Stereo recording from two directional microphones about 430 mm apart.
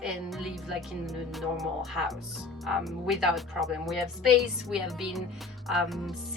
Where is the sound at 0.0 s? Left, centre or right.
Centre.